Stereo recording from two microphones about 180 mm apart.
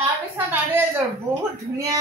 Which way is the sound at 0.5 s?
10° right (ahead or behind).